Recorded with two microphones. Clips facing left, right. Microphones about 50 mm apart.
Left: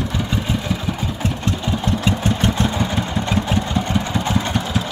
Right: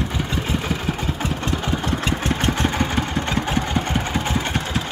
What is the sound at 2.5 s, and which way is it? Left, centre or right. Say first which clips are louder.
Vehicle: left 1 dB; right.